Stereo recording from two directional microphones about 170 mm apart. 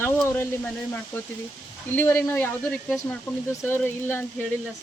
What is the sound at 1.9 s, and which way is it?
Speech, 15° left (ahead or behind).